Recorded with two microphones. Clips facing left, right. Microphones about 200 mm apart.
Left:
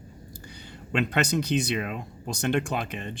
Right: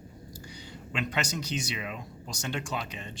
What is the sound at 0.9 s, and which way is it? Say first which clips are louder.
Speech: left 7 dB; 60° left (ahead or behind).